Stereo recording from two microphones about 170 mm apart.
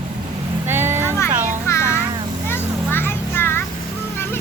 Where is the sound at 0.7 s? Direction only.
15° right (ahead or behind).